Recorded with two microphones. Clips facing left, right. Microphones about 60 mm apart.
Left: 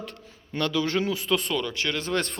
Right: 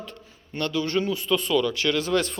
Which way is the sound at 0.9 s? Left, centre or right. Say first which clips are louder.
Right 1 dB; left.